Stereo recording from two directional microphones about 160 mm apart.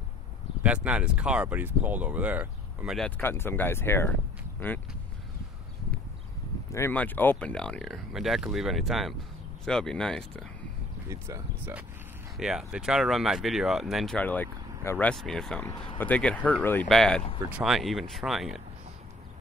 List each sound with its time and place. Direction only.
0.6 s speech: 10° right (ahead or behind)
3.0 s speech: 15° left (ahead or behind)
6.7 s speech: 15° left (ahead or behind)
11.1 s speech: 15° right (ahead or behind); by 18.6 s centre (ahead or behind)